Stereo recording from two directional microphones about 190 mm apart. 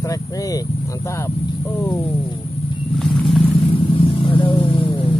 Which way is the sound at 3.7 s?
30° left (ahead or behind).